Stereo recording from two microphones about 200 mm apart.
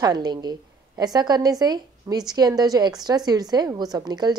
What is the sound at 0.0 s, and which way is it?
A woman's voice, 20° right (ahead or behind).